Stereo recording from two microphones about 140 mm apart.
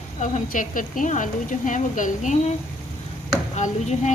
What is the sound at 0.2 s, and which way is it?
A woman's voice, 65° left (ahead or behind).